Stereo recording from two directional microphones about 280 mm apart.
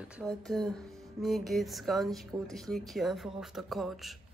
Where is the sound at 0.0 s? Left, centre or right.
Centre.